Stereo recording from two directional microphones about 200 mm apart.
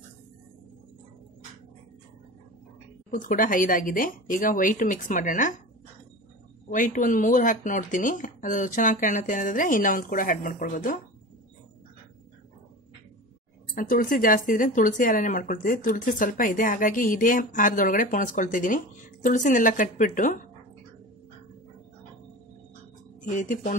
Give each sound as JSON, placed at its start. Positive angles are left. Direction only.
{"t": 3.1, "sound": "speech", "side_deg": 40}
{"t": 6.7, "sound": "speech", "side_deg": 40}
{"t": 13.7, "sound": "speech", "side_deg": 45}
{"t": 23.3, "sound": "speech", "side_deg": 40}